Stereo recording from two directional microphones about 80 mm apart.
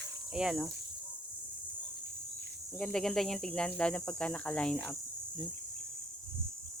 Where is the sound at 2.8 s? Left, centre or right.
Centre.